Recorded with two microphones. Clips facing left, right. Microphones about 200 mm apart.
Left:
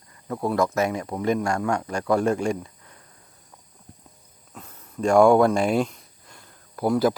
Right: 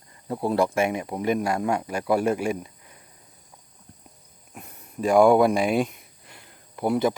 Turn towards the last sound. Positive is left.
turn(degrees=0)  # may be behind; listen again after turning